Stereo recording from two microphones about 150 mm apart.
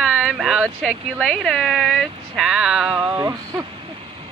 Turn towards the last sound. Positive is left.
turn(degrees=-20)  # may be behind; listen again after turning